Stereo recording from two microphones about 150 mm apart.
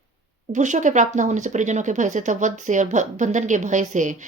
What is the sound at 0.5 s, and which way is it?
Speech, 55° right (ahead or behind).